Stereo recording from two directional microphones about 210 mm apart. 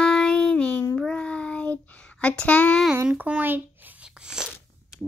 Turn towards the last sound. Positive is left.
turn(degrees=-5)  # may be behind; listen again after turning